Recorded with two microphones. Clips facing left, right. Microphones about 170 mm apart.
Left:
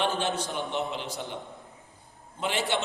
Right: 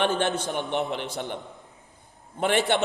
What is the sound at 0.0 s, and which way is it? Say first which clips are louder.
A man's voice: right 4 dB; 60° right (ahead or behind).